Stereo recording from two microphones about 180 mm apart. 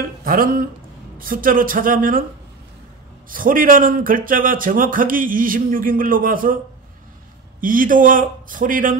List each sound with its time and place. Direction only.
0.2 s speech: 55° right (ahead or behind)
3.3 s speech: 50° right (ahead or behind)
7.6 s speech: 50° right (ahead or behind)